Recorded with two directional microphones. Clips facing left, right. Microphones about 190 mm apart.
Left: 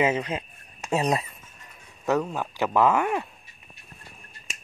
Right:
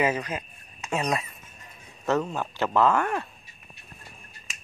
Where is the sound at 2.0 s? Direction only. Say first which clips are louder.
Left 1 dB; 10° left (ahead or behind).